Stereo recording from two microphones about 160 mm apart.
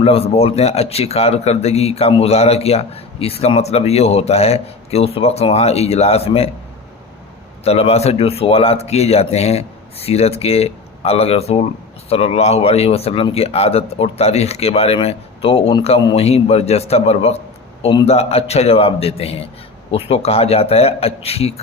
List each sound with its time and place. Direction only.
0.0 s a man's voice: 35° left (ahead or behind)
7.6 s a man's voice: 40° left (ahead or behind)